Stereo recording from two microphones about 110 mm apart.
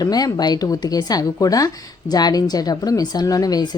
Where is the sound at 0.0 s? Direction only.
35° left (ahead or behind).